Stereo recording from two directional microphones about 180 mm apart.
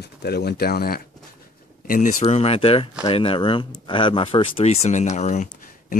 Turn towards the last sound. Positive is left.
turn(degrees=40)  # may be behind; listen again after turning